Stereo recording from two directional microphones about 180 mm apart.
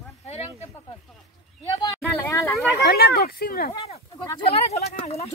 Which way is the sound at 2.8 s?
60° left (ahead or behind).